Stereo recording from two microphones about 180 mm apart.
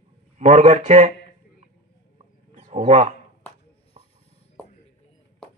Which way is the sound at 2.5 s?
45° right (ahead or behind).